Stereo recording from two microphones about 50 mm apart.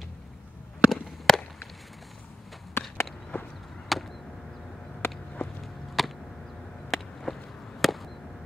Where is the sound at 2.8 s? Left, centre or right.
Left.